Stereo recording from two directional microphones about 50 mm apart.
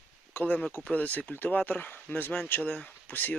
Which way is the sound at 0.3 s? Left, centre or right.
Left.